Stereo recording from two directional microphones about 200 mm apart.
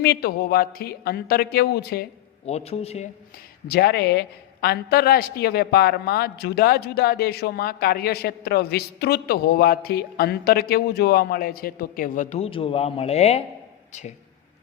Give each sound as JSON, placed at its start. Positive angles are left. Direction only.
{"t": 0.0, "sound": "a woman's voice", "side_deg": 50}
{"t": 2.5, "sound": "a man's voice", "side_deg": 30}
{"t": 3.7, "sound": "a woman's voice", "side_deg": 55}